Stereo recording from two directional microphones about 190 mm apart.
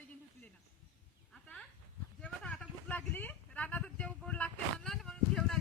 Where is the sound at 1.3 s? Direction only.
5° left (ahead or behind).